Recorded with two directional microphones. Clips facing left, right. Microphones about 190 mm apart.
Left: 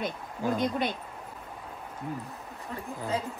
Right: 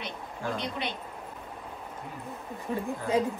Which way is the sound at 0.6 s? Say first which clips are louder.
Left 5 dB; 50° left (ahead or behind).